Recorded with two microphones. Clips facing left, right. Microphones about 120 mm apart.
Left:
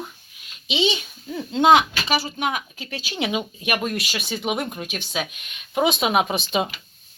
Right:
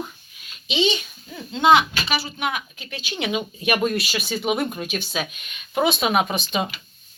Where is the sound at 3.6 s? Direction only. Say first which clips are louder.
Right 3 dB; 5° left (ahead or behind).